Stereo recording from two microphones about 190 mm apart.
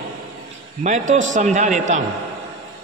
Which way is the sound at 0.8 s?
40° right (ahead or behind).